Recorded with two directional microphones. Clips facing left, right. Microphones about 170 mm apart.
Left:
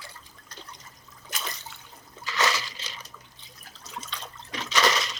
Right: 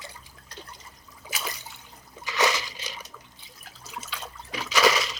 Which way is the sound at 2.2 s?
15° right (ahead or behind).